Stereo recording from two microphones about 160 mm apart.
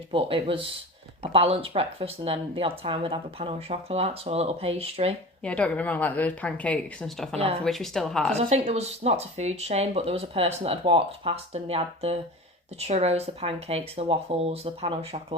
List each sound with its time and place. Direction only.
0.1 s speech: 35° right (ahead or behind)
5.4 s speech: 5° left (ahead or behind)
7.3 s speech: 35° right (ahead or behind)
7.6 s a woman's voice: 5° left (ahead or behind)
8.3 s speech: 40° right (ahead or behind)